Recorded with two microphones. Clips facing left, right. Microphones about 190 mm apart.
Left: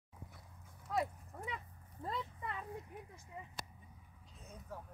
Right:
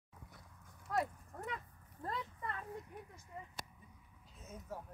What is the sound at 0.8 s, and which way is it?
Livestock, centre (ahead or behind).